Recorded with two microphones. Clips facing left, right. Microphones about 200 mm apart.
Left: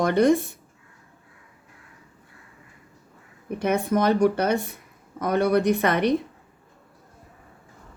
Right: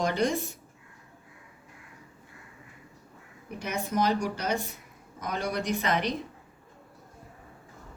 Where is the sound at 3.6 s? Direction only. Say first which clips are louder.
Left 7 dB; 60° left (ahead or behind).